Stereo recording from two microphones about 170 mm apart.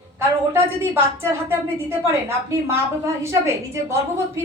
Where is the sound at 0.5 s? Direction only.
15° right (ahead or behind).